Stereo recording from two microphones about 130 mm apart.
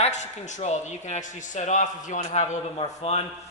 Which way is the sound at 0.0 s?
60° left (ahead or behind).